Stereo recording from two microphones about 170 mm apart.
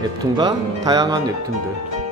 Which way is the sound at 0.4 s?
25° right (ahead or behind).